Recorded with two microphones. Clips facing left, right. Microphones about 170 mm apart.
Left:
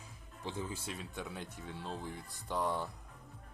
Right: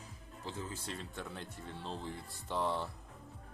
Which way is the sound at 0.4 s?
15° left (ahead or behind).